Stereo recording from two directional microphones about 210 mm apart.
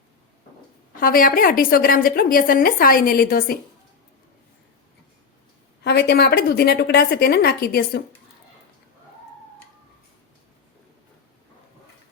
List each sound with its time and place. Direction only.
0.9 s a woman's voice: 40° left (ahead or behind)
5.8 s a woman's voice: 55° left (ahead or behind)